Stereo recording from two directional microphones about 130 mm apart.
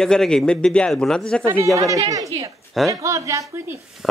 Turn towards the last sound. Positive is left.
turn(degrees=-25)  # may be behind; listen again after turning